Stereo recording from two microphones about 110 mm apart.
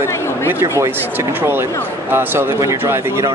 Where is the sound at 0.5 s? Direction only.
25° right (ahead or behind).